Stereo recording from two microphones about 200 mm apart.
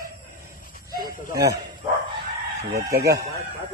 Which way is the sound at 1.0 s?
20° right (ahead or behind).